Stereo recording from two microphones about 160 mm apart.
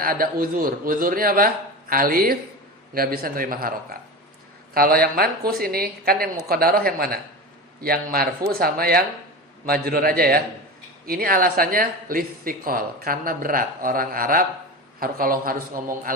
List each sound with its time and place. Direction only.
0.0 s a woman's voice: 65° right (ahead or behind)